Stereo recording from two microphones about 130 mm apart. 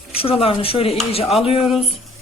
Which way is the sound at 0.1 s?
45° left (ahead or behind).